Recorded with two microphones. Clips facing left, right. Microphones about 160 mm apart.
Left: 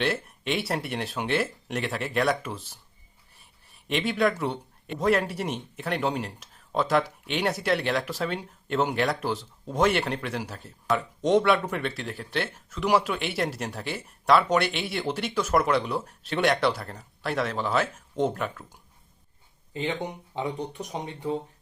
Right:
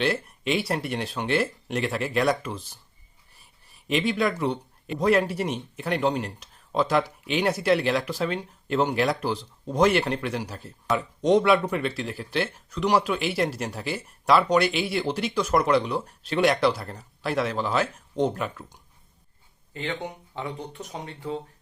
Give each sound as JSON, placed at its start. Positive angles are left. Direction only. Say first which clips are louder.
{"t": 0.0, "sound": "a man's voice", "louder": "right 2 dB", "side_deg": 0}
{"t": 3.8, "sound": "a man's voice", "louder": "right 1 dB", "side_deg": 0}
{"t": 19.7, "sound": "speech", "louder": "left 2 dB", "side_deg": 15}